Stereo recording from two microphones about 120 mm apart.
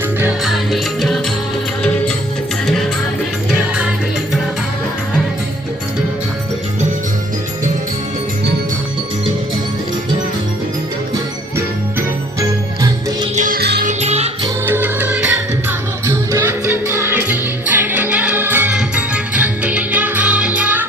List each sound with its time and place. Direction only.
0.4 s music: centre (ahead or behind)
11.5 s music: 25° right (ahead or behind)
13.3 s music: 85° right; by 14.3 s 65° right (ahead or behind)
14.7 s music: 15° right (ahead or behind)